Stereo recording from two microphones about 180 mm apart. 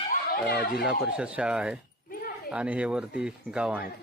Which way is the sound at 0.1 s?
60° left (ahead or behind).